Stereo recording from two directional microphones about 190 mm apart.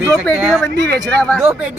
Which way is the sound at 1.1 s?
5° left (ahead or behind).